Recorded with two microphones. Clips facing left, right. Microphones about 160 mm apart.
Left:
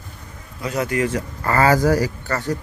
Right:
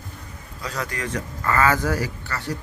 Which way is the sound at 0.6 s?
25° left (ahead or behind).